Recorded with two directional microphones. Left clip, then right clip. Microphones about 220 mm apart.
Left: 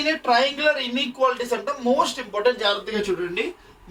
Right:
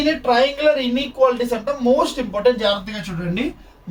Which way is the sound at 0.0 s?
15° left (ahead or behind).